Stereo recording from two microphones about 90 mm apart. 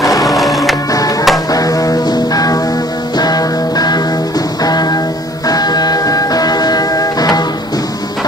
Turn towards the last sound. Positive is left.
turn(degrees=45)  # may be behind; listen again after turning